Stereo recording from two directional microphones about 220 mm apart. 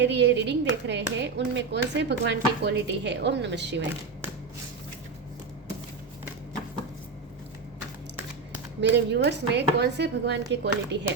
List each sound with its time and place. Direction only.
0.0 s speech: 50° right (ahead or behind)
8.8 s speech: 50° right (ahead or behind)